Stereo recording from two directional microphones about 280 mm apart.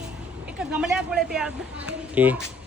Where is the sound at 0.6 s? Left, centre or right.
Centre.